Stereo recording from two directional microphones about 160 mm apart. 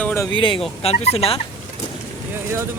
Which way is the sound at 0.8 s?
40° left (ahead or behind).